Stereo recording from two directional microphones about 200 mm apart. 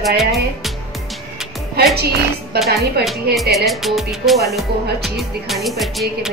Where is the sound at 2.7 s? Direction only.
50° right (ahead or behind).